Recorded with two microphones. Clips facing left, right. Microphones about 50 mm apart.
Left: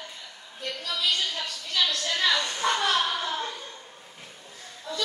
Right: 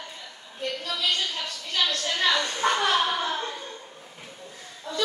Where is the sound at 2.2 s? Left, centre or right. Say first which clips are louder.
Right 2 dB; right.